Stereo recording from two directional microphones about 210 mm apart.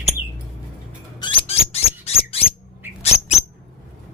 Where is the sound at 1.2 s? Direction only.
25° left (ahead or behind).